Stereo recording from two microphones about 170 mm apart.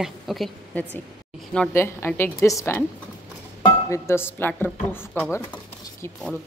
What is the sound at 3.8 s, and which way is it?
Speech, 15° left (ahead or behind).